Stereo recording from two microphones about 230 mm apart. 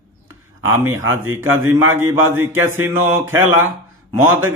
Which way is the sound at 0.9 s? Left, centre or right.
Right.